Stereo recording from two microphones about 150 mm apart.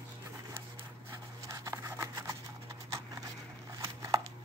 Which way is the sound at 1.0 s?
20° right (ahead or behind).